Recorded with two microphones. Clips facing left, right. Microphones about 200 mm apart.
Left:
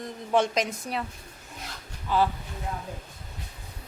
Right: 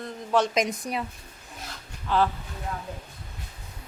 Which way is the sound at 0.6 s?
15° right (ahead or behind).